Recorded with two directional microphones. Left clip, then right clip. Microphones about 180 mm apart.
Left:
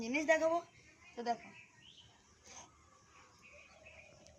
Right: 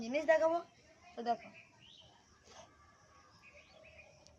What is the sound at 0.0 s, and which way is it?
Speech, 20° right (ahead or behind).